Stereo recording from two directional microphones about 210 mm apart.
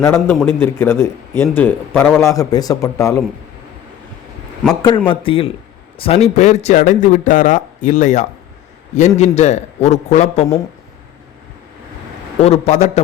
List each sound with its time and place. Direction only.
0.0 s a man's voice: 10° left (ahead or behind)
4.7 s speech: 20° left (ahead or behind)
12.4 s speech: 30° left (ahead or behind)